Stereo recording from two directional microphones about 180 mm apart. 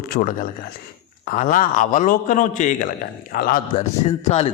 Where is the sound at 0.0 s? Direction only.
50° left (ahead or behind).